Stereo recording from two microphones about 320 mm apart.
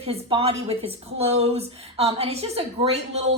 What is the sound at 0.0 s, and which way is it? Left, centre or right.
A woman's voice, centre.